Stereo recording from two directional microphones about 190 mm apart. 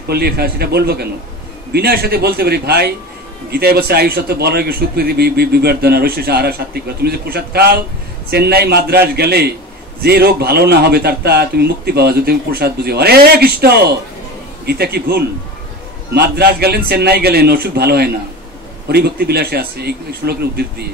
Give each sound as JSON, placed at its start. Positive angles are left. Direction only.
{"t": 0.1, "sound": "a man's voice", "side_deg": -55}